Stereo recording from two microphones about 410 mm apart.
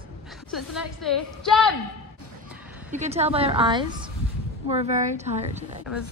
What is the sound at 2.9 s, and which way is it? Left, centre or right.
A woman's voice, centre.